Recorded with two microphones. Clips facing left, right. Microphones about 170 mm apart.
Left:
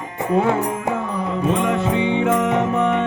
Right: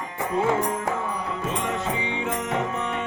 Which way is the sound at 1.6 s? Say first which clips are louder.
Left 8 dB; 65° left (ahead or behind).